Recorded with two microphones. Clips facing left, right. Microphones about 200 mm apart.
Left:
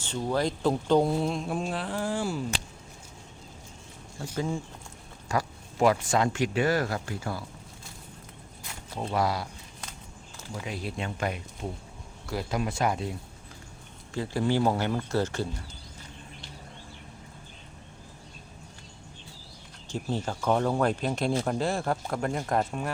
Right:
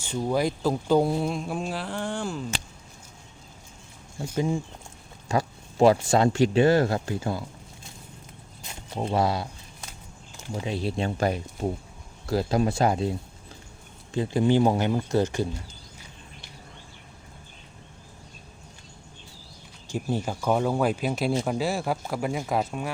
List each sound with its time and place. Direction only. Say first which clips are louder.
0.0 s speech: right 3 dB; 10° right (ahead or behind); by 2.4 s 5° left (ahead or behind)
4.4 s speech: right 4 dB; 15° right (ahead or behind)
5.3 s speech: right 3 dB; 25° right (ahead or behind)
8.6 s speech: right 4 dB; 20° right (ahead or behind)
19.9 s speech: right 3 dB; 10° right (ahead or behind)